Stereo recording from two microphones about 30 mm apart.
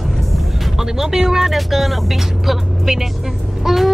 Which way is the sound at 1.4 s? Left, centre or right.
Centre.